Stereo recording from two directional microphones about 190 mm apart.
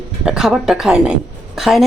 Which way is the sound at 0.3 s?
5° right (ahead or behind).